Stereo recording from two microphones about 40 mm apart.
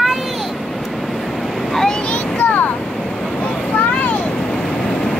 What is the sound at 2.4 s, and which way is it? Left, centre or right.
Vehicle, left.